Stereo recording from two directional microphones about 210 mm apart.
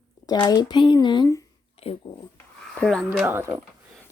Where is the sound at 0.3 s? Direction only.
20° left (ahead or behind).